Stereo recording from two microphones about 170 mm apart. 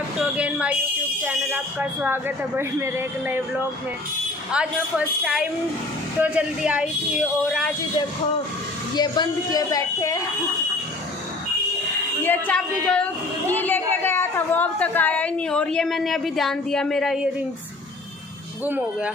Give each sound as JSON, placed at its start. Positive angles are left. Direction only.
{"t": 0.2, "sound": "speech", "side_deg": -10}
{"t": 8.9, "sound": "a woman's voice", "side_deg": 25}
{"t": 12.2, "sound": "a woman's voice", "side_deg": 10}
{"t": 18.7, "sound": "speech", "side_deg": -10}